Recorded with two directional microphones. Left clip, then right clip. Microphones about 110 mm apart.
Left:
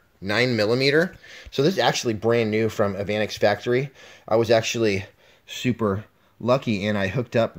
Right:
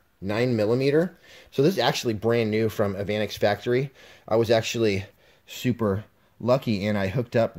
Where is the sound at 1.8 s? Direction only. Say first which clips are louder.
Left 2 dB; 5° right (ahead or behind).